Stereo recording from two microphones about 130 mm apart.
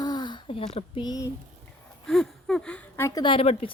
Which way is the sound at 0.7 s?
50° left (ahead or behind).